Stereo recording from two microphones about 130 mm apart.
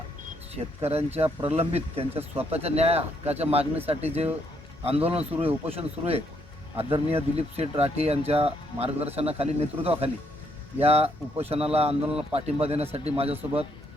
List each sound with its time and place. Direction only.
0.5 s speech: 50° right (ahead or behind)